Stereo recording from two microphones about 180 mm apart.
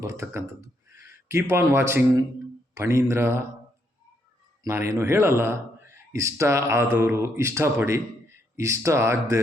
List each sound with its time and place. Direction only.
0.0 s speech: 15° right (ahead or behind)
4.6 s speech: 15° right (ahead or behind)